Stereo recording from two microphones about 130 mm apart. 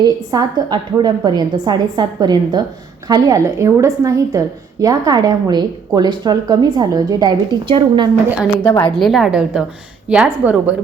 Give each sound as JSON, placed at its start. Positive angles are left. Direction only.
{"t": 0.0, "sound": "a woman's voice", "side_deg": -30}
{"t": 8.6, "sound": "a woman's voice", "side_deg": 25}
{"t": 9.0, "sound": "a woman's voice", "side_deg": 0}